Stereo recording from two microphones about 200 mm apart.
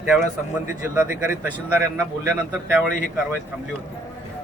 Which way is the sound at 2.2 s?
10° right (ahead or behind).